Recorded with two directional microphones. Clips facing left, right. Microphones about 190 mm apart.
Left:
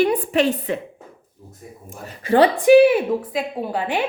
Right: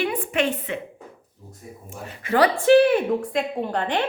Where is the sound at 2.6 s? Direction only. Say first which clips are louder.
Left 3 dB; 10° left (ahead or behind).